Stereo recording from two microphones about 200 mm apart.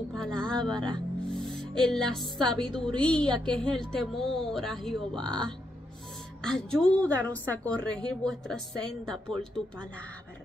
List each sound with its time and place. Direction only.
0.1 s speech: 5° left (ahead or behind)